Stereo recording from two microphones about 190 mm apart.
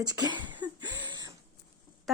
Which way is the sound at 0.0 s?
20° right (ahead or behind).